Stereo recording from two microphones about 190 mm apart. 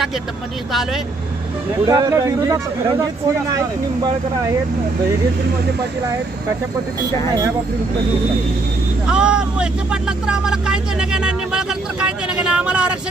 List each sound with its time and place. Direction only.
1.9 s speech: 15° right (ahead or behind)
9.0 s speech: 5° right (ahead or behind)